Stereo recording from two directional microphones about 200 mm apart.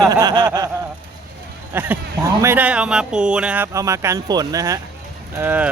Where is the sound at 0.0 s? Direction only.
20° right (ahead or behind).